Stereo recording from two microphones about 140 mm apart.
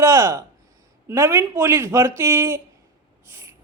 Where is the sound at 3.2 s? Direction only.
20° right (ahead or behind).